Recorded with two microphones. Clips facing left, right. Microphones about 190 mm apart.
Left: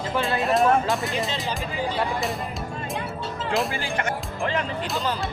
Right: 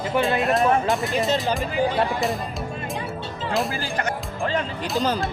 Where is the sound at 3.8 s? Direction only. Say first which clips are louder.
Right 1 dB; 40° right (ahead or behind).